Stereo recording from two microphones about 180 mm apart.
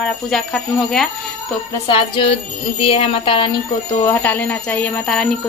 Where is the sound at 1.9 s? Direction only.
30° left (ahead or behind).